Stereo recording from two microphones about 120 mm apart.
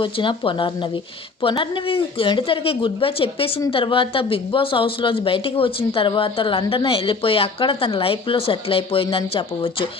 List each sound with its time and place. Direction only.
0.0 s speech: 45° left (ahead or behind)